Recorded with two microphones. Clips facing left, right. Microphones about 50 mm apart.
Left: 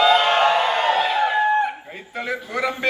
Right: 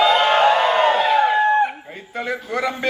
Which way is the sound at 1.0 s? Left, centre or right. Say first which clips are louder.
Right 4 dB; right.